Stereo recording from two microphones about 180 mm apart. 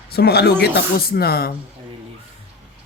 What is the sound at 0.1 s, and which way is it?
Speech, 60° left (ahead or behind).